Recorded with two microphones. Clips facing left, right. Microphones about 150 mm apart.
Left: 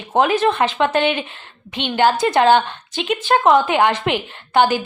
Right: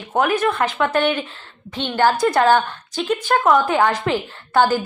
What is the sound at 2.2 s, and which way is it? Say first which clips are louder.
A woman's voice: left 1 dB; 20° left (ahead or behind).